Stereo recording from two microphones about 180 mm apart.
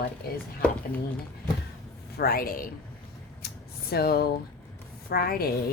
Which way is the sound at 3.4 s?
60° left (ahead or behind).